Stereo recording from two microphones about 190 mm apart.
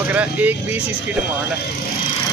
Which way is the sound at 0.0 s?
10° right (ahead or behind).